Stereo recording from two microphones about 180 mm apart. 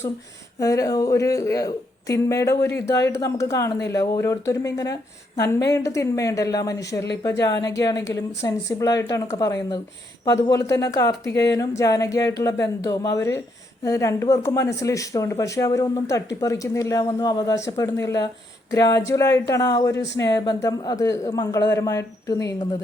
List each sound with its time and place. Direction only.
0.6 s a woman's voice: 20° left (ahead or behind)